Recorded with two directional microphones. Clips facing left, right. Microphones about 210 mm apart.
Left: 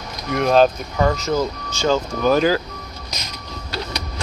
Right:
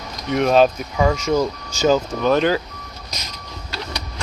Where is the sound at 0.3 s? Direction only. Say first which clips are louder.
Even; centre (ahead or behind).